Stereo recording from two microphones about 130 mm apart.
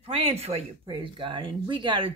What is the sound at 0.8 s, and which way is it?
Speech, 35° right (ahead or behind).